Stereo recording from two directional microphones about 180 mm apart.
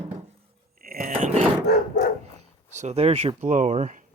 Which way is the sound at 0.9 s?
50° right (ahead or behind).